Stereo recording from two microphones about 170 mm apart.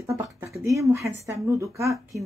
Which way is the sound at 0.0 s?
15° right (ahead or behind).